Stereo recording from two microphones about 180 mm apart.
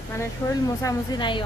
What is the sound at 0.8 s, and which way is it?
Speech, 20° left (ahead or behind).